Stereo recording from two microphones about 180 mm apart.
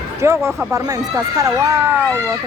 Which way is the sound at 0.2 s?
15° right (ahead or behind).